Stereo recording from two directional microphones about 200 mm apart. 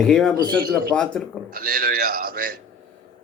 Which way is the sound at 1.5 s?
45° right (ahead or behind).